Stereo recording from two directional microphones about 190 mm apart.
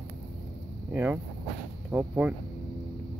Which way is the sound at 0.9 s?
10° right (ahead or behind).